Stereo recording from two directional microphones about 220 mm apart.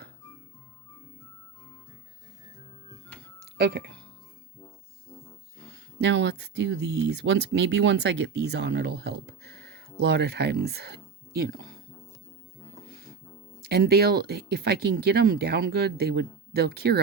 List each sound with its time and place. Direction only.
3.6 s speech: 50° right (ahead or behind)
5.7 s speech: 55° right (ahead or behind)
13.6 s speech: 45° right (ahead or behind)